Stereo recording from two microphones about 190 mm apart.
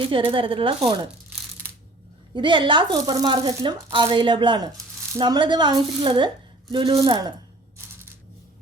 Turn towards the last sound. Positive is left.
turn(degrees=-20)  # may be behind; listen again after turning